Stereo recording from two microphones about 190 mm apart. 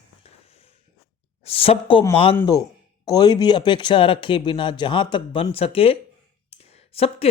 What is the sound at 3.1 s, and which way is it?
Speech, 20° left (ahead or behind).